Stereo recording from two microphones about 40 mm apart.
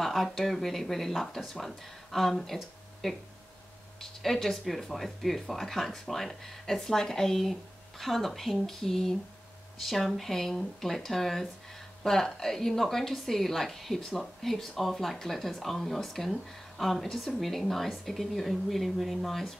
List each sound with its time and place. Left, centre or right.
0.0 s a woman's voice: centre